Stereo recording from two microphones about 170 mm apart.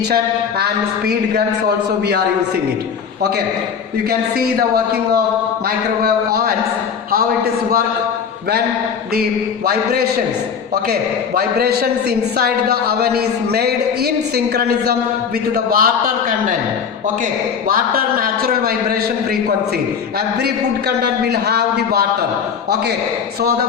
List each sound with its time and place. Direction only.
4.4 s a man's voice: 65° right (ahead or behind)
11.3 s a man's voice: 70° right (ahead or behind)
15.5 s a man's voice: 60° right (ahead or behind)
17.7 s a man's voice: 60° right (ahead or behind)
20.4 s a man's voice: 75° right (ahead or behind)